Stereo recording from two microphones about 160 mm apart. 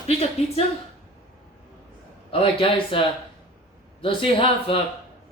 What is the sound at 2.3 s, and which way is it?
Speech, 35° left (ahead or behind).